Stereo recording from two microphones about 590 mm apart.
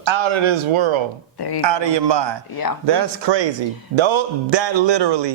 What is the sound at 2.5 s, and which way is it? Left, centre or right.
Speech, left.